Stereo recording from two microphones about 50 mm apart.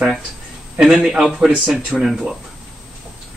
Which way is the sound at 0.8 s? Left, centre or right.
Centre.